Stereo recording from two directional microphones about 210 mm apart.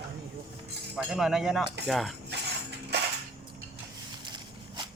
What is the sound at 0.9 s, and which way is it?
Speech, 5° right (ahead or behind).